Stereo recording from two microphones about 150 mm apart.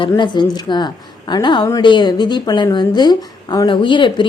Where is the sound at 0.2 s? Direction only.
30° left (ahead or behind).